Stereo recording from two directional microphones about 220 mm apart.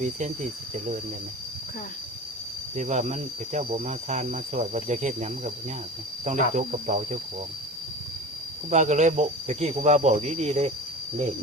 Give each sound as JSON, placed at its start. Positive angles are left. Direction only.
{"t": 2.7, "sound": "speech", "side_deg": -35}
{"t": 8.7, "sound": "speech", "side_deg": -35}